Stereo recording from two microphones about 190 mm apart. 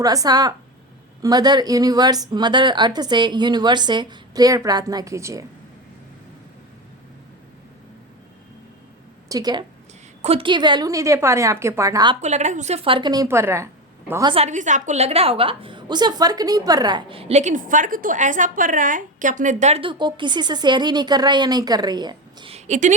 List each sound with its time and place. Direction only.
0.0 s a woman's voice: 20° right (ahead or behind)
9.3 s a woman's voice: 20° right (ahead or behind)
10.2 s a woman's voice: 30° right (ahead or behind)
12.2 s a woman's voice: 40° right (ahead or behind); by 14.3 s 20° right (ahead or behind)
14.3 s a woman's voice: 40° right (ahead or behind)